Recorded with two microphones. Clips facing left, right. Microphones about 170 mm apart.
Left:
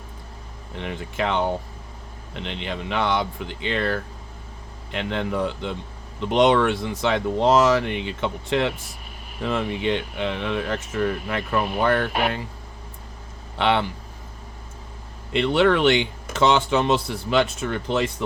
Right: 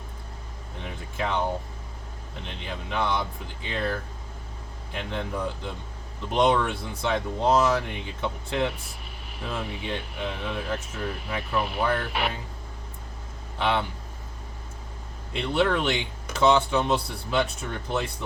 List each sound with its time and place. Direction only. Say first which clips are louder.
0.8 s speech: left 5 dB; 80° left
13.6 s speech: left 4 dB; 75° left (ahead or behind)
15.3 s speech: left 6 dB; 85° left